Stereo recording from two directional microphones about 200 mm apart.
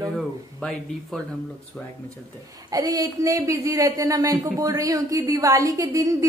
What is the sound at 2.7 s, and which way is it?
A woman's voice, 20° right (ahead or behind).